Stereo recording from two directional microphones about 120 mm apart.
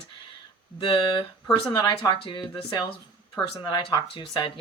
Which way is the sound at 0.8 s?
40° left (ahead or behind).